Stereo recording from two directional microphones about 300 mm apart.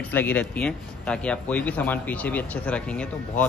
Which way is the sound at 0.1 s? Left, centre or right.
Centre.